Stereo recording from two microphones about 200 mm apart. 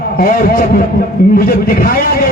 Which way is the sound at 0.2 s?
45° left (ahead or behind).